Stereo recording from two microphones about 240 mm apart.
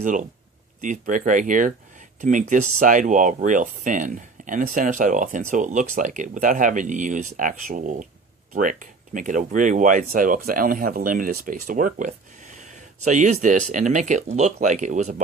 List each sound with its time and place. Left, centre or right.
0.0 s speech: right